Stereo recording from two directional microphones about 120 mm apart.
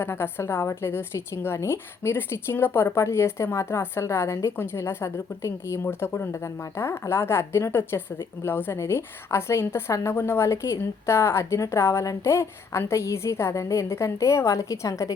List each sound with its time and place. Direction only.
0.0 s a woman's voice: 20° left (ahead or behind)